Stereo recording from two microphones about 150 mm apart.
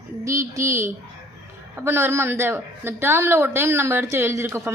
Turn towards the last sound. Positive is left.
turn(degrees=-20)  # may be behind; listen again after turning